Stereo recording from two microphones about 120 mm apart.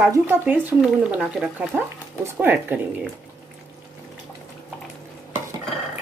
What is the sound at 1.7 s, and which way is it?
Speech, 15° right (ahead or behind).